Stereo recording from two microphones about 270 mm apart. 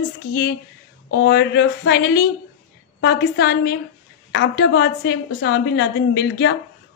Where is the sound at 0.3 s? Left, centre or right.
Left.